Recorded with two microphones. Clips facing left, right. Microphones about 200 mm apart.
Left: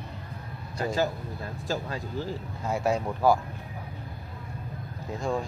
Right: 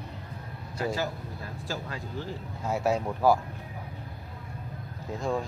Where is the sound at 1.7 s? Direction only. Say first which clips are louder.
Left 5 dB; 40° left (ahead or behind).